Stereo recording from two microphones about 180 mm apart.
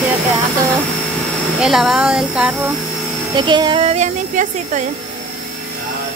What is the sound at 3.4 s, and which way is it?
Speech, 25° right (ahead or behind).